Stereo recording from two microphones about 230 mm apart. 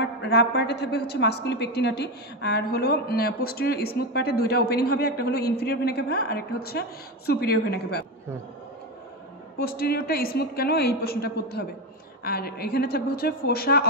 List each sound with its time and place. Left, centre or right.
0.0 s a woman's voice: left
9.6 s a woman's voice: left